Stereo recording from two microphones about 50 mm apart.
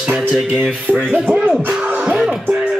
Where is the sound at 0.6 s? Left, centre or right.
Right.